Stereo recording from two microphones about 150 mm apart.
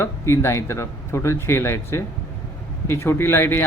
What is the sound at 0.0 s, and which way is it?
Speech, 15° left (ahead or behind).